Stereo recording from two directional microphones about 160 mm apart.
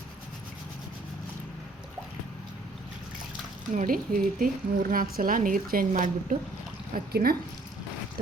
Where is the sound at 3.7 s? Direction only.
60° right (ahead or behind).